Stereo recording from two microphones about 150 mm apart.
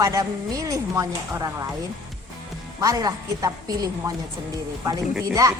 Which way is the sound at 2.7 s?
25° right (ahead or behind).